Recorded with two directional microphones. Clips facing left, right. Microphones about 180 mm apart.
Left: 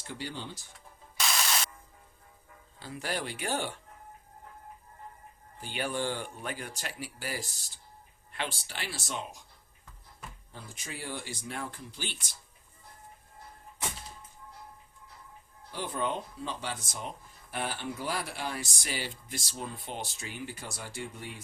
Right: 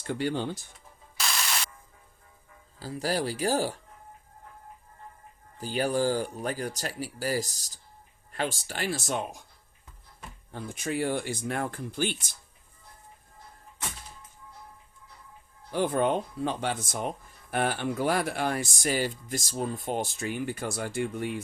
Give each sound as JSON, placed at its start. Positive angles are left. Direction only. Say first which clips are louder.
{"t": 0.1, "sound": "speech", "louder": "right 10 dB", "side_deg": -55}
{"t": 2.7, "sound": "speech", "louder": "right 6 dB", "side_deg": -35}
{"t": 5.5, "sound": "speech", "louder": "right 7 dB", "side_deg": -40}
{"t": 10.5, "sound": "speech", "louder": "right 13 dB", "side_deg": -60}
{"t": 15.7, "sound": "speech", "louder": "right 8 dB", "side_deg": -55}